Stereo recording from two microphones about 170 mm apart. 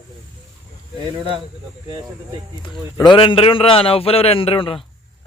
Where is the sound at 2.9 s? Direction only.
25° left (ahead or behind).